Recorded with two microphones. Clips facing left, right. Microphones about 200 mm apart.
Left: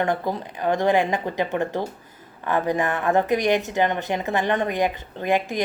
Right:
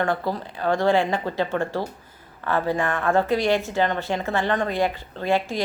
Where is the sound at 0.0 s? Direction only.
20° left (ahead or behind).